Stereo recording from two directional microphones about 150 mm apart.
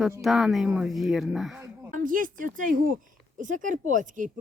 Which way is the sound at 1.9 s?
65° right (ahead or behind).